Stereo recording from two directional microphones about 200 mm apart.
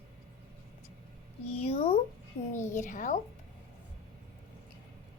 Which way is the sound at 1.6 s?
30° left (ahead or behind).